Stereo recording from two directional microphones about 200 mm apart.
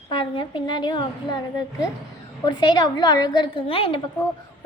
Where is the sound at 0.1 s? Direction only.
25° left (ahead or behind).